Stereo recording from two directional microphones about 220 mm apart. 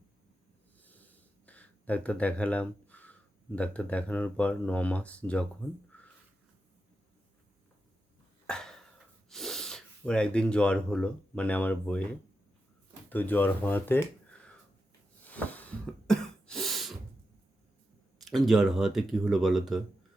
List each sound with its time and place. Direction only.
0.8 s wheeze: 5° left (ahead or behind)
1.5 s speech: 5° left (ahead or behind)
8.4 s cough: 5° left (ahead or behind)
9.3 s speech: centre (ahead or behind)
13.1 s speech: 10° left (ahead or behind)
15.3 s cough: 5° left (ahead or behind)
18.3 s speech: centre (ahead or behind)